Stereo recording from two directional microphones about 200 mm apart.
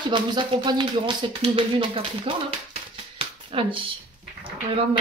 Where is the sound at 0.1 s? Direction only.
25° right (ahead or behind).